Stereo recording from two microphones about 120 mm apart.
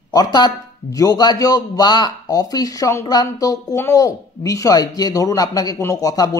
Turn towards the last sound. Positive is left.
turn(degrees=30)  # may be behind; listen again after turning